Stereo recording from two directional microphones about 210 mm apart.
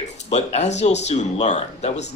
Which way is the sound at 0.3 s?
30° left (ahead or behind).